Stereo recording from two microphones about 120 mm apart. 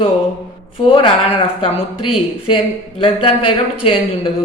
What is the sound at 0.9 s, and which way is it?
Speech, 50° left (ahead or behind).